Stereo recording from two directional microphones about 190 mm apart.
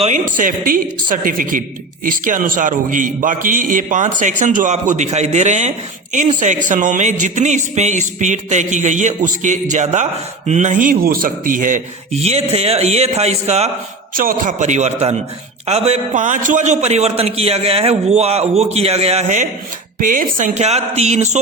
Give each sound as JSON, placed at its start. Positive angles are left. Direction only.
{"t": 0.0, "sound": "a man's voice", "side_deg": -40}
{"t": 12.2, "sound": "a man's voice", "side_deg": -35}
{"t": 14.1, "sound": "a man's voice", "side_deg": -45}